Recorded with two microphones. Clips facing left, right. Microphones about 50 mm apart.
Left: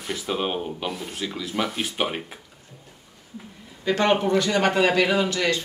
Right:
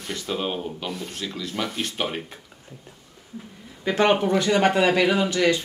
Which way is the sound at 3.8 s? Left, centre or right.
Centre.